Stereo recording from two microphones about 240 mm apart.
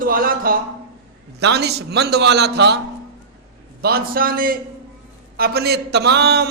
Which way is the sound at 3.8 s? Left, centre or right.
Right.